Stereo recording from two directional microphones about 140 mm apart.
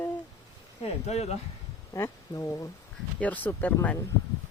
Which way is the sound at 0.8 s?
50° left (ahead or behind).